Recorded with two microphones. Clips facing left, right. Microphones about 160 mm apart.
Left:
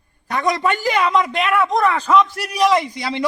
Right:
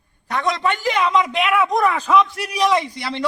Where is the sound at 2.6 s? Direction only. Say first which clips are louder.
Left 2 dB; 10° left (ahead or behind).